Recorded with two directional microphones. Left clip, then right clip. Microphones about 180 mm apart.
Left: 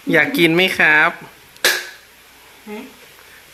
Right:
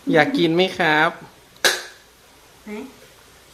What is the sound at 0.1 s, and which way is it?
Speech, centre (ahead or behind).